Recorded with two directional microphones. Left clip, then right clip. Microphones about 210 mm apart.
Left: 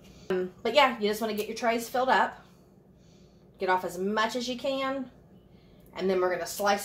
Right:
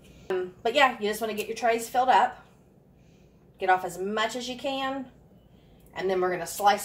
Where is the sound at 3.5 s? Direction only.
35° left (ahead or behind).